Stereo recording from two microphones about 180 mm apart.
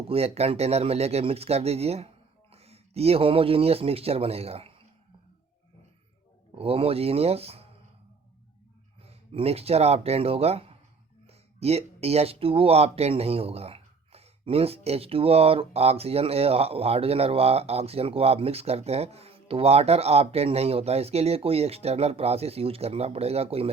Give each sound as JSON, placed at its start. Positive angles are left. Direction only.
{"t": 0.1, "sound": "speech", "side_deg": -35}
{"t": 6.6, "sound": "speech", "side_deg": -30}
{"t": 9.0, "sound": "speech", "side_deg": -35}